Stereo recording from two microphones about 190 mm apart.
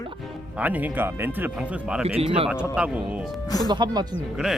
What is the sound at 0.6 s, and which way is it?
Speech, 10° right (ahead or behind).